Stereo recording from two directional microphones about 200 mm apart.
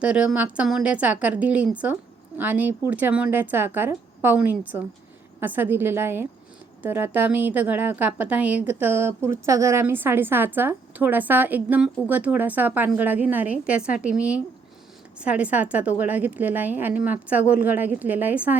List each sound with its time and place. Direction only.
0.0 s a woman's voice: 5° right (ahead or behind)